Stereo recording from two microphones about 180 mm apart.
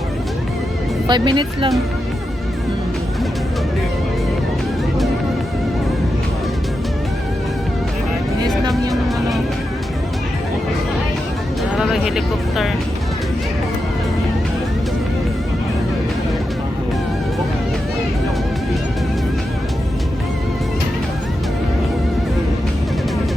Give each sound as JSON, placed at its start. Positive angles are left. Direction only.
{"t": 1.0, "sound": "speech", "side_deg": -25}
{"t": 8.7, "sound": "music", "side_deg": 0}
{"t": 11.8, "sound": "speech", "side_deg": 0}